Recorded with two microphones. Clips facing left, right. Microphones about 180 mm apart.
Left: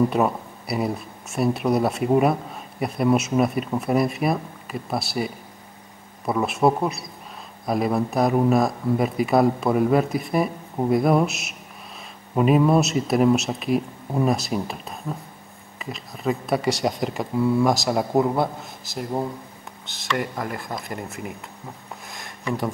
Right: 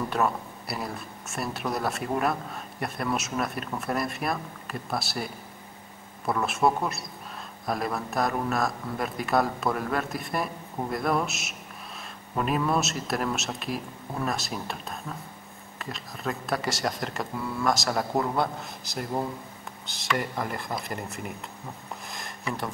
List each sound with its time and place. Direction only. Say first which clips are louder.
0.7 s speech: left 10 dB; centre (ahead or behind)
6.4 s speech: left 5 dB; centre (ahead or behind)
18.1 s a man's voice: left 8 dB; 20° left (ahead or behind)
18.4 s speech: left 4 dB; centre (ahead or behind)